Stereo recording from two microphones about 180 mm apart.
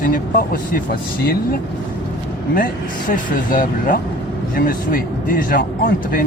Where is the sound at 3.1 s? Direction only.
50° left (ahead or behind).